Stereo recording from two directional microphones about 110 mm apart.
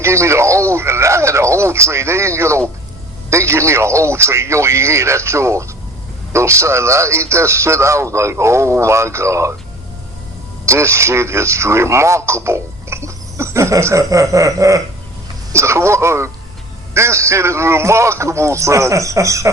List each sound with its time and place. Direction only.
0.0 s a man's voice: 25° right (ahead or behind)
10.7 s a man's voice: 25° right (ahead or behind)